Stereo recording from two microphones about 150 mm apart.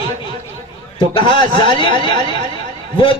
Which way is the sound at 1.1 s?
35° left (ahead or behind).